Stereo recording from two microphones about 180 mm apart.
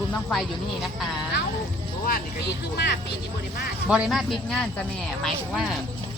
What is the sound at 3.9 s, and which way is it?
Speech, 5° right (ahead or behind).